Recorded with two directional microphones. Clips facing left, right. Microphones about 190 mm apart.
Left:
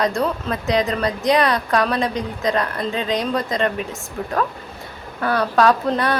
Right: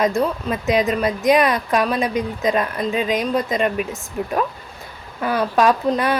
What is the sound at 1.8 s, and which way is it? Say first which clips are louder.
Speech: even; 10° right (ahead or behind).